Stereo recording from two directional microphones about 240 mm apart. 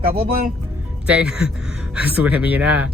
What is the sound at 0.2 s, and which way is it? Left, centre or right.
Speech, right.